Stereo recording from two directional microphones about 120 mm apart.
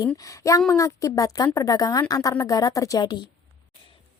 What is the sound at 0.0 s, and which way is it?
A woman's voice, 30° left (ahead or behind).